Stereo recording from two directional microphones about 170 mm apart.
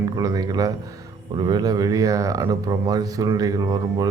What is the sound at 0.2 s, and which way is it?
Speech, 20° right (ahead or behind).